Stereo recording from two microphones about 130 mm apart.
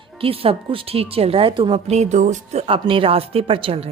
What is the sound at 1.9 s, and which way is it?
Speech, 60° right (ahead or behind).